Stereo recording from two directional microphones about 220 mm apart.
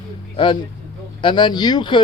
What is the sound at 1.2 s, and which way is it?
Speech, 20° left (ahead or behind).